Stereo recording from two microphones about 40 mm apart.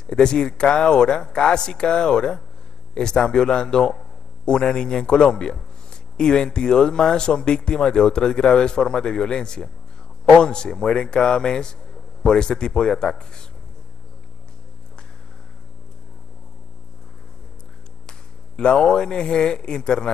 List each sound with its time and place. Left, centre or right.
0.0 s speech: centre
18.6 s speech: left